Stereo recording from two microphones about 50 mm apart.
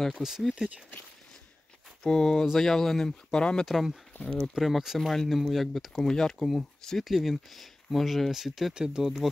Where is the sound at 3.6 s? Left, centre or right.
Centre.